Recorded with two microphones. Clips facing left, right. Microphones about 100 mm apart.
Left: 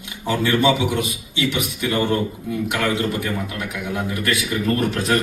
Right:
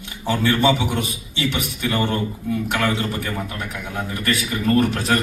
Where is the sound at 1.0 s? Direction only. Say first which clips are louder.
Left 1 dB; 35° right (ahead or behind).